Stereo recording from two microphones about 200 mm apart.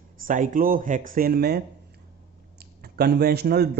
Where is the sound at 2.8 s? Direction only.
50° right (ahead or behind).